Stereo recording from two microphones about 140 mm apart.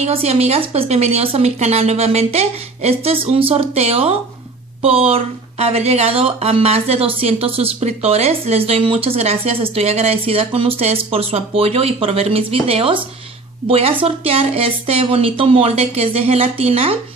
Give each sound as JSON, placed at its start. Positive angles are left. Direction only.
{"t": 0.0, "sound": "speech", "side_deg": -50}